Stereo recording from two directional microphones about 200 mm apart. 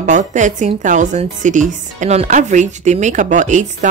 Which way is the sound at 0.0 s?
40° right (ahead or behind).